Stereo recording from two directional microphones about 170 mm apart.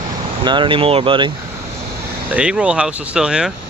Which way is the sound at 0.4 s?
30° right (ahead or behind).